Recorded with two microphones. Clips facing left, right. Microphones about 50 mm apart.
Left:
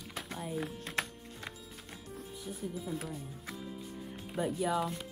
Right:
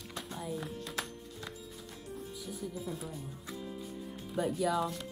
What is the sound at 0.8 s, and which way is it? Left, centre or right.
Music, left.